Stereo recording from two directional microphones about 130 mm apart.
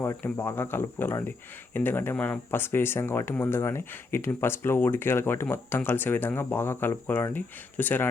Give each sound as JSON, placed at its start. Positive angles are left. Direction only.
{"t": 0.0, "sound": "speech", "side_deg": 20}